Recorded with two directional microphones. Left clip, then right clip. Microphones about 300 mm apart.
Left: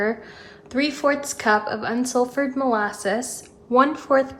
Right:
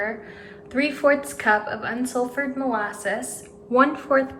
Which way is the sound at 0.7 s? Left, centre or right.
Centre.